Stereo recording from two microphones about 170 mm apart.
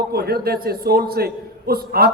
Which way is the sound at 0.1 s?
65° right (ahead or behind).